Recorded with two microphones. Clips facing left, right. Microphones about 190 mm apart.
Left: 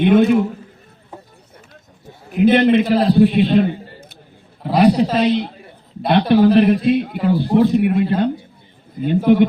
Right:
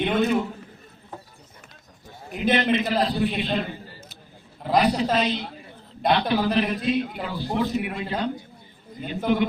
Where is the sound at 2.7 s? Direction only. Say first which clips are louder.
Left 9 dB; 55° left (ahead or behind).